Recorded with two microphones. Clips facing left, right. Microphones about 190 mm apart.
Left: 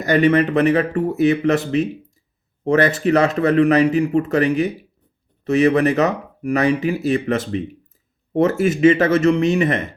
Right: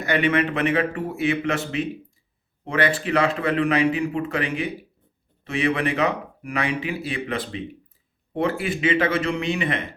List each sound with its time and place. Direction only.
0.0 s speech: 40° left (ahead or behind)